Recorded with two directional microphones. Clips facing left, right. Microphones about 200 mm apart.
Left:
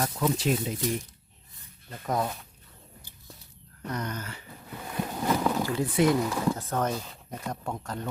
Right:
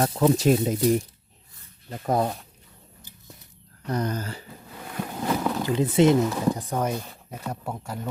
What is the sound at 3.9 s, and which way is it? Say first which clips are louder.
Speech: right 7 dB; 30° right (ahead or behind).